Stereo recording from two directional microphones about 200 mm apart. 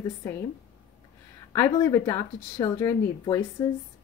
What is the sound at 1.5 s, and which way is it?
A woman's voice, 15° left (ahead or behind).